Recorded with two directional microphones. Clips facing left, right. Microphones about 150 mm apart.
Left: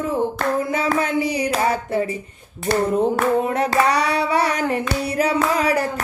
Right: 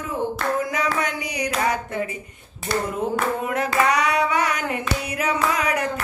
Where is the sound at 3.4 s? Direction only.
30° left (ahead or behind).